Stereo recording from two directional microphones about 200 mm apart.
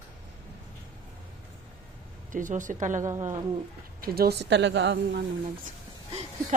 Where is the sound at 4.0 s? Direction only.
50° right (ahead or behind).